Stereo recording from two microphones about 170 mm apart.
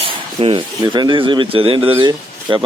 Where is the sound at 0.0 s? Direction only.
30° right (ahead or behind).